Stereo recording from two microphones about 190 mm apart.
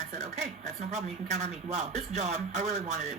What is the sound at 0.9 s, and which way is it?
Speech, 35° right (ahead or behind).